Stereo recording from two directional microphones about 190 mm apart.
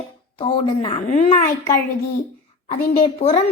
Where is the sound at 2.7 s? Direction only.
25° left (ahead or behind).